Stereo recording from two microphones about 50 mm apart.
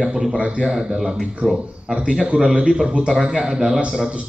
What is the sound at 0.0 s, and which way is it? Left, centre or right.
Speech, centre.